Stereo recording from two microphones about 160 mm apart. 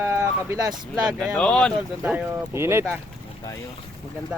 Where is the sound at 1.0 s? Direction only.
Centre (ahead or behind).